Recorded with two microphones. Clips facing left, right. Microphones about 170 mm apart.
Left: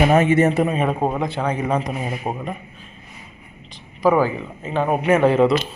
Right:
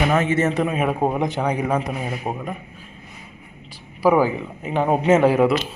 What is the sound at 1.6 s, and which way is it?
Speech, 5° right (ahead or behind).